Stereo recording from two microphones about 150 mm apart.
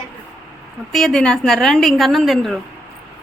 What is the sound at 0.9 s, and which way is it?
A woman's voice, 5° left (ahead or behind).